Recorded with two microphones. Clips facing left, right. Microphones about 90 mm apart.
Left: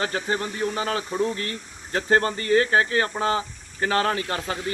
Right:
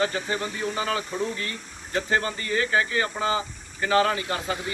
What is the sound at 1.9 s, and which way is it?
Speech, 55° left (ahead or behind).